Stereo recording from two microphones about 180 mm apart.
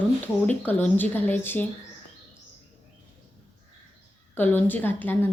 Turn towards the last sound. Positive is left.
turn(degrees=10)  # may be behind; listen again after turning